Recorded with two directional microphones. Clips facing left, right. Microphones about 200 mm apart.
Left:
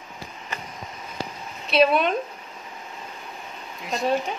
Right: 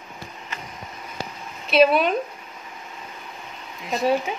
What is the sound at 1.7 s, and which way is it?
Speech, 5° right (ahead or behind).